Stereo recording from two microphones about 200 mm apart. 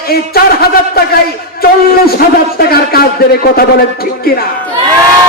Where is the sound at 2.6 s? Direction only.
50° left (ahead or behind).